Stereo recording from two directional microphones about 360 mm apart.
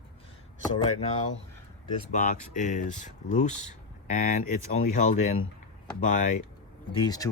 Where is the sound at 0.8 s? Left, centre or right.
Centre.